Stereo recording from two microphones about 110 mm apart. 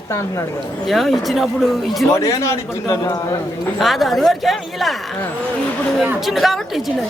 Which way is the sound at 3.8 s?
Centre (ahead or behind).